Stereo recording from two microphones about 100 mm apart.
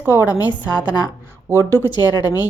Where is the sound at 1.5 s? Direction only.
30° right (ahead or behind).